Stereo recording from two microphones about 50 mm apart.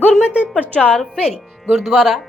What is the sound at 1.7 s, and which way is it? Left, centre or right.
Speech, centre.